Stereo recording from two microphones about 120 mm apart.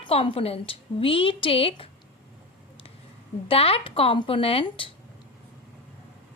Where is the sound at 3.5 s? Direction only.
50° left (ahead or behind).